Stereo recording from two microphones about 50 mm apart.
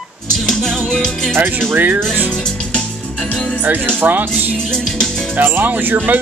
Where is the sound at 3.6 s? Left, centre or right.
Right.